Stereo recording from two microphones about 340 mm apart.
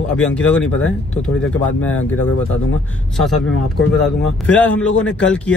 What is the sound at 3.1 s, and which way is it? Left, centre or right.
Speech, centre.